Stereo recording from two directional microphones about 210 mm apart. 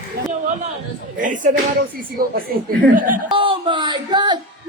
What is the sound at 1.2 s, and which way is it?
Speech, 35° right (ahead or behind).